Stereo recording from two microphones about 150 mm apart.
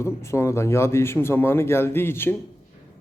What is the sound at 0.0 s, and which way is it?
A man's voice, 20° left (ahead or behind).